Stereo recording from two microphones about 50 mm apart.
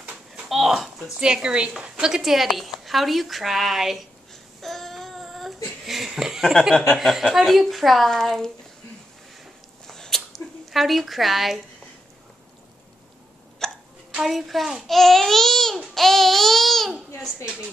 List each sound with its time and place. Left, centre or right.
0.5 s a woman's voice: centre
1.2 s a woman's voice: centre
4.6 s child singing: centre
5.9 s a woman's voice: centre
9.8 s a sound: centre
13.6 s hiccup: centre
14.2 s a woman's voice: centre
15.9 s babbling: centre